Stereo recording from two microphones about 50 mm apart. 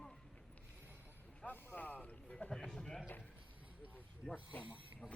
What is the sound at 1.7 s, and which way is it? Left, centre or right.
Music, left.